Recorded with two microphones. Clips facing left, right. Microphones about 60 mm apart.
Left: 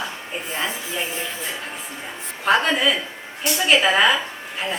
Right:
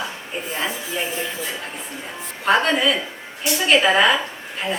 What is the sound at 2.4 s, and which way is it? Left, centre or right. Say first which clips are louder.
A woman's voice: right 1 dB; centre.